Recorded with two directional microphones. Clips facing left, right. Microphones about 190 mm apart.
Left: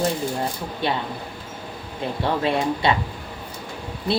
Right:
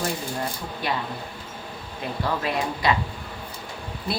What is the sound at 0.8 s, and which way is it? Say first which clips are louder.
Speech: left 4 dB; 25° left (ahead or behind).